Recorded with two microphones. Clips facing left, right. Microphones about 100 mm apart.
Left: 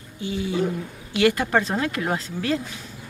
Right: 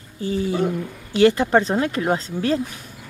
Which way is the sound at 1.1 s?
30° right (ahead or behind).